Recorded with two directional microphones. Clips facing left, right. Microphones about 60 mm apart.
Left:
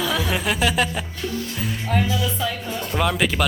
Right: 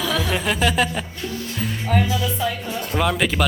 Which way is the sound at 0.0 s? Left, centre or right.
Centre.